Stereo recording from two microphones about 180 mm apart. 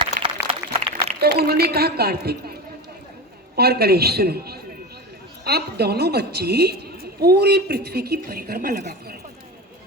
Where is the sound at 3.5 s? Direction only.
60° right (ahead or behind).